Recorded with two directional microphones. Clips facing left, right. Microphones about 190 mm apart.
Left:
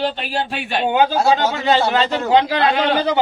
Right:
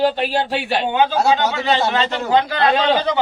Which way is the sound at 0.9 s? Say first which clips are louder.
Left 1 dB; 40° left (ahead or behind).